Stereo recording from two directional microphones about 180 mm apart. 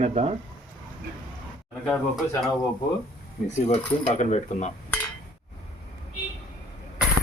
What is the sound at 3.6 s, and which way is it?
Speech, 40° left (ahead or behind).